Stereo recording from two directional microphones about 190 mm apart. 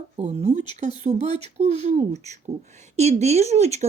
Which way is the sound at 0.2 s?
35° right (ahead or behind).